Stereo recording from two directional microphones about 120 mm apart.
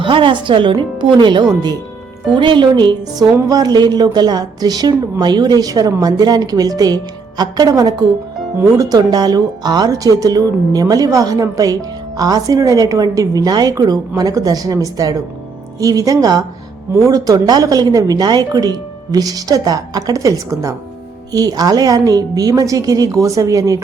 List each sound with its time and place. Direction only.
0.0 s a woman's voice: 45° right (ahead or behind); by 23.8 s 30° right (ahead or behind)